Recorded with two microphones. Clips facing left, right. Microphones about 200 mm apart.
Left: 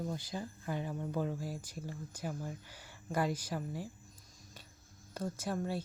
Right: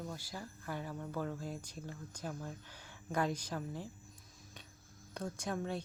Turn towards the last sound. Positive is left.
turn(degrees=5)  # may be behind; listen again after turning